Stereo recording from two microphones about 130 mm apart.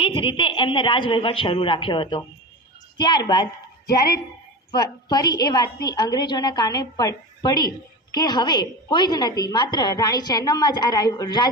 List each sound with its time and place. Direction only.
0.0 s a woman's voice: 40° left (ahead or behind)
4.7 s a woman's voice: 30° left (ahead or behind)